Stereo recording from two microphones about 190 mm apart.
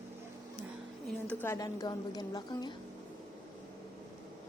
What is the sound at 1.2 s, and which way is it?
A woman's voice, 10° left (ahead or behind).